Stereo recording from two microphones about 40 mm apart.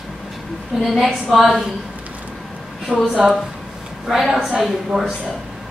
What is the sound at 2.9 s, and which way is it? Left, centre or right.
Speech, right.